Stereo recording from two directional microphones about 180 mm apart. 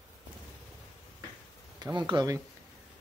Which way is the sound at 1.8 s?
25° right (ahead or behind).